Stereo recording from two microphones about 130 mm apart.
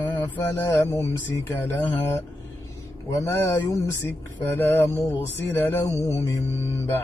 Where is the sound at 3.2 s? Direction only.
20° left (ahead or behind).